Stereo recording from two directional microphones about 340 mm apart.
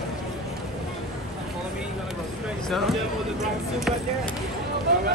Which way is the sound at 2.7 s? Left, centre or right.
Centre.